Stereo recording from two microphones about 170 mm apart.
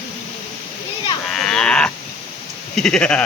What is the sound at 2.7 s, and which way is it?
Sheep, 5° left (ahead or behind).